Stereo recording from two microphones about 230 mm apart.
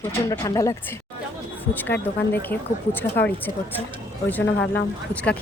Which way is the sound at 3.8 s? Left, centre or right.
Right.